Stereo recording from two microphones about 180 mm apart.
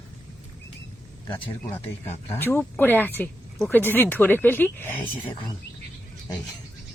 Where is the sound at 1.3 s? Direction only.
25° left (ahead or behind).